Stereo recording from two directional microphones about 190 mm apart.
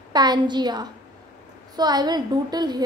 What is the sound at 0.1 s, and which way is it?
A woman's voice, 20° right (ahead or behind).